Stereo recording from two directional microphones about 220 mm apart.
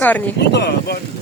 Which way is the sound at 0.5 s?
50° left (ahead or behind).